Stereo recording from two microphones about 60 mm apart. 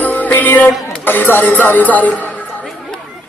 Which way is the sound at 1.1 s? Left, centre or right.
Left.